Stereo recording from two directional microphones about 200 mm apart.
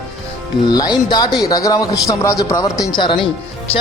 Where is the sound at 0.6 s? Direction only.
20° left (ahead or behind).